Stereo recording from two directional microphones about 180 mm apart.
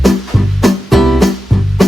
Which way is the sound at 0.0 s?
Centre (ahead or behind).